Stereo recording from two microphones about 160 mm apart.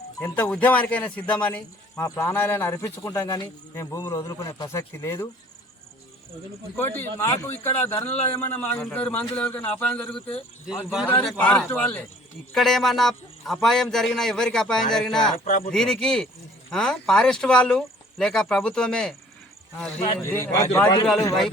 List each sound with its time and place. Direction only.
0.2 s speech: 10° left (ahead or behind)
6.7 s speech: 15° left (ahead or behind)
15.4 s speech: 55° left (ahead or behind)
15.7 s speech: 5° left (ahead or behind)
20.2 s speech: 15° left (ahead or behind)